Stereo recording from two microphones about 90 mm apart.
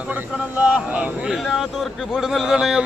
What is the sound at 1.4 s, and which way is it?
A man's voice, centre (ahead or behind).